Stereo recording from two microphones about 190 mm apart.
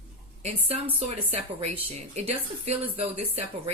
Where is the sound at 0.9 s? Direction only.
30° right (ahead or behind).